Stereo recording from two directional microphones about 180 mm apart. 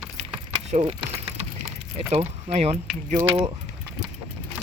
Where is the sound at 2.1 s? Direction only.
35° right (ahead or behind).